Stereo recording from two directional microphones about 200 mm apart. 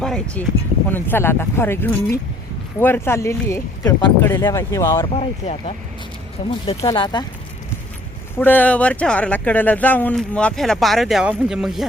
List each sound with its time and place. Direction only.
0.0 s speech: 5° left (ahead or behind)
5.0 s speech: 30° left (ahead or behind)
8.4 s speech: 10° left (ahead or behind)